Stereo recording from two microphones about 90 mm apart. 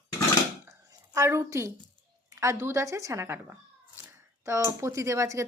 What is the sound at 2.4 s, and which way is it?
Speech, 35° right (ahead or behind).